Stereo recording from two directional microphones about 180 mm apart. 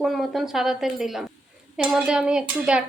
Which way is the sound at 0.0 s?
Centre (ahead or behind).